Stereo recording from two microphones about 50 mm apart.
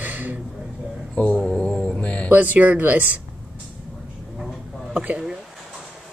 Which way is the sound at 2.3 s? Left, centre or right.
Right.